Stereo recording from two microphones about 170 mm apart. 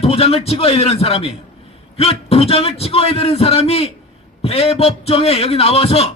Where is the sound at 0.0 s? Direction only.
35° left (ahead or behind).